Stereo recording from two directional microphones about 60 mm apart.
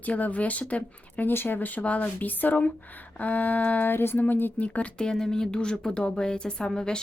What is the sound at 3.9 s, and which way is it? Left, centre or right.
Speech, left.